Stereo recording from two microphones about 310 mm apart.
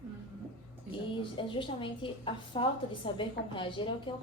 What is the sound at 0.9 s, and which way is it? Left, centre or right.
A woman's voice, centre.